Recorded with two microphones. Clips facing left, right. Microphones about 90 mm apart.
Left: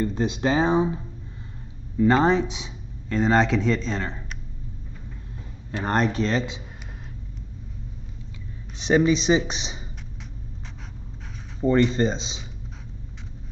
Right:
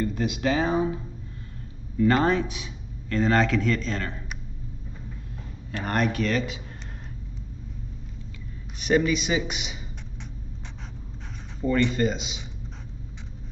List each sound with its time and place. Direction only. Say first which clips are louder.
0.0 s speech: left 2 dB; 30° left (ahead or behind)
2.0 s speech: left 2 dB; 20° left (ahead or behind)
5.7 s speech: left 3 dB; 25° left (ahead or behind)
8.7 s speech: left 3 dB; 25° left (ahead or behind)
11.6 s speech: left 3 dB; 25° left (ahead or behind)